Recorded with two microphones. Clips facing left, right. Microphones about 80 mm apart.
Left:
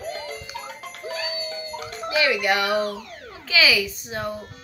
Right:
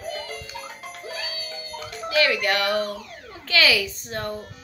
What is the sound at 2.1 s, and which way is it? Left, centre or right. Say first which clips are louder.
A woman's voice: even; centre.